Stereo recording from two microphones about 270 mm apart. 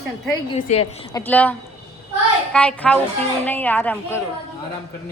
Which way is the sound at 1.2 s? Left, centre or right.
Centre.